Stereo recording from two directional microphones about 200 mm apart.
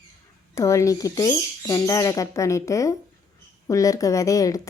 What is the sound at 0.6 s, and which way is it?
A woman's voice, 15° left (ahead or behind).